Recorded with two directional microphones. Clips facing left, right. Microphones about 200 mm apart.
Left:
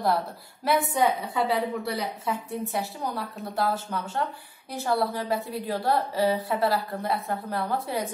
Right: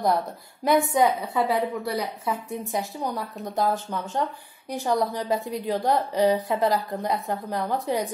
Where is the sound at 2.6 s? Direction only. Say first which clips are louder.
Right 4 dB; 15° right (ahead or behind).